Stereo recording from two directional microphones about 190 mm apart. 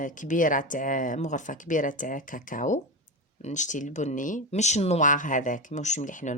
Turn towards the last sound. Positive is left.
turn(degrees=40)  # may be behind; listen again after turning